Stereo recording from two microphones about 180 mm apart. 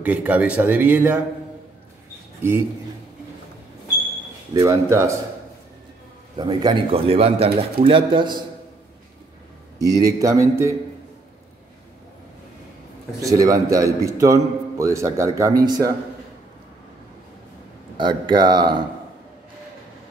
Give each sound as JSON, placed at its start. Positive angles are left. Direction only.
{"t": 0.0, "sound": "a man's voice", "side_deg": -10}
{"t": 4.6, "sound": "a man's voice", "side_deg": -15}
{"t": 6.3, "sound": "a man's voice", "side_deg": -25}
{"t": 9.8, "sound": "a man's voice", "side_deg": -20}
{"t": 13.2, "sound": "a man's voice", "side_deg": -20}
{"t": 17.9, "sound": "speech", "side_deg": -25}